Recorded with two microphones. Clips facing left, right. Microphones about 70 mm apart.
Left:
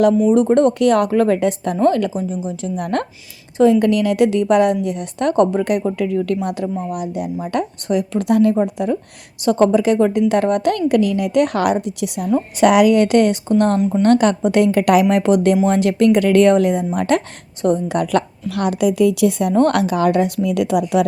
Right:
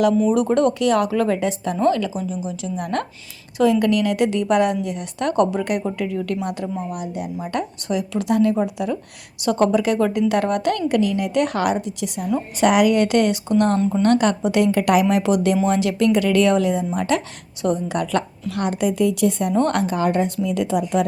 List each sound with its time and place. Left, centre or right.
0.3 s speech: left
0.7 s speech: left
3.6 s speech: left
4.4 s speech: left
8.5 s speech: left
18.8 s a woman's voice: left
19.7 s a woman's voice: left